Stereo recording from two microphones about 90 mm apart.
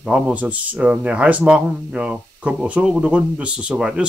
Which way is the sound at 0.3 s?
15° right (ahead or behind).